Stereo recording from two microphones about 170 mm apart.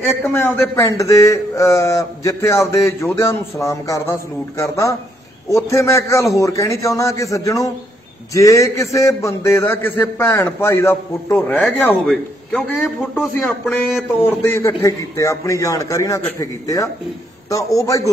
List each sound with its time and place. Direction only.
0.0 s a man's voice: 15° left (ahead or behind)